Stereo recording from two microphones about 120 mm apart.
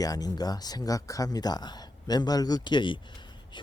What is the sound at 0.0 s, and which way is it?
Speech, 30° left (ahead or behind).